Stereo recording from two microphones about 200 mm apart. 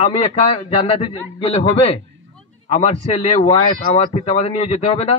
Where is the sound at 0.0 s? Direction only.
30° left (ahead or behind).